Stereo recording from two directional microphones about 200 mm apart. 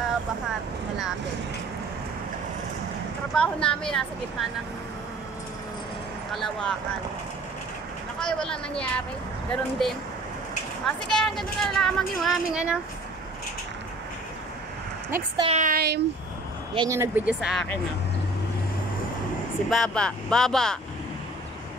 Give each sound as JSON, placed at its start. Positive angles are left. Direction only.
{"t": 3.3, "sound": "speech", "side_deg": 5}
{"t": 6.3, "sound": "speech", "side_deg": 0}
{"t": 8.2, "sound": "speech", "side_deg": 5}
{"t": 11.1, "sound": "speech", "side_deg": 0}
{"t": 15.0, "sound": "a woman's voice", "side_deg": -10}
{"t": 15.4, "sound": "speech", "side_deg": -40}
{"t": 16.7, "sound": "speech", "side_deg": -15}
{"t": 17.4, "sound": "speech", "side_deg": 0}
{"t": 19.7, "sound": "speech", "side_deg": 5}